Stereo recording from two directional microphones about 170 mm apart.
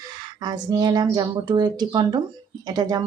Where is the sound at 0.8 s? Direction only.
25° right (ahead or behind).